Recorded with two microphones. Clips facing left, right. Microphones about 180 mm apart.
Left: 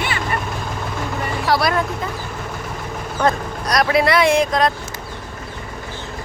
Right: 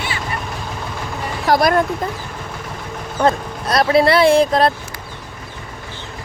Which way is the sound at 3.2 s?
30° right (ahead or behind).